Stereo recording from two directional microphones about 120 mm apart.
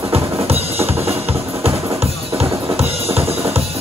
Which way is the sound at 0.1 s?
55° right (ahead or behind).